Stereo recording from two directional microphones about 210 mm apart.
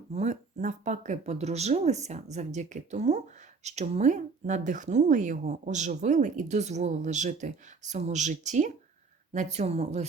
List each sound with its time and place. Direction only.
0.1 s speech: 35° right (ahead or behind)